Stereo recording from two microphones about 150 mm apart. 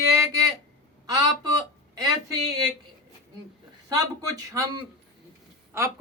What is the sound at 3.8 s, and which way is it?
Speech, 25° right (ahead or behind).